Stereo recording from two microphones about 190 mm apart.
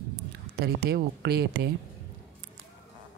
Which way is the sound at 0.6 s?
55° right (ahead or behind).